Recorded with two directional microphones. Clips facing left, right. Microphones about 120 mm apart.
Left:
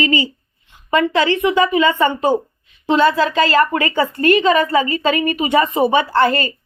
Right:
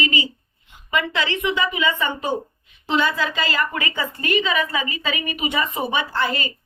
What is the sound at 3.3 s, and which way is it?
A woman's voice, 40° left (ahead or behind).